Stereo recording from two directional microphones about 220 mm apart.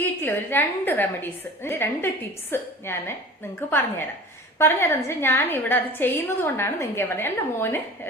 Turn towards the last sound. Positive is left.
turn(degrees=10)  # may be behind; listen again after turning